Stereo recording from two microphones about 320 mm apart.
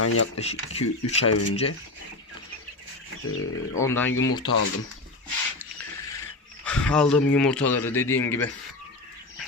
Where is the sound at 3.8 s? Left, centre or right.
Centre.